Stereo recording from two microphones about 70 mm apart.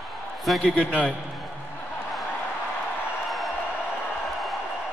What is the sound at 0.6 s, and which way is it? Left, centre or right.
Speech, centre.